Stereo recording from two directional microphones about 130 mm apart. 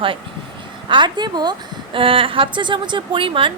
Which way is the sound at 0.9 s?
35° right (ahead or behind).